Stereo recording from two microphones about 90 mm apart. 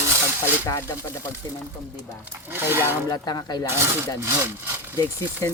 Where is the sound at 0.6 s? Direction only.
40° left (ahead or behind).